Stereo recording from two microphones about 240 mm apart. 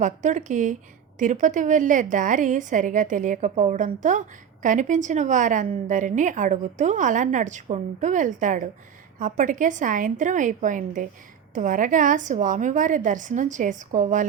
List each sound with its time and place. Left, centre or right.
0.0 s a woman's voice: right